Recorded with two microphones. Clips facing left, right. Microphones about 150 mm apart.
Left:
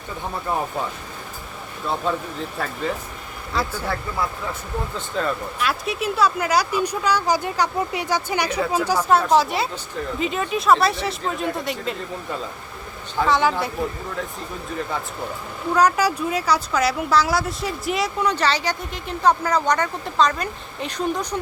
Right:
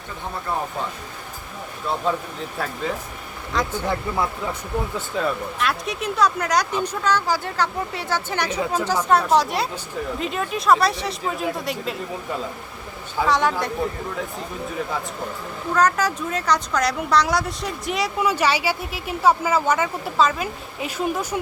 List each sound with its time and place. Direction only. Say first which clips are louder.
2.1 s speech: even; centre (ahead or behind)
3.8 s speech: right 2 dB; 20° right (ahead or behind)
4.9 s speech: left 2 dB; 5° right (ahead or behind)
13.1 s speech: left 1 dB; centre (ahead or behind)
14.8 s speech: even; centre (ahead or behind)
15.7 s speech: left 2 dB; 10° left (ahead or behind); by 21.4 s 5° right (ahead or behind)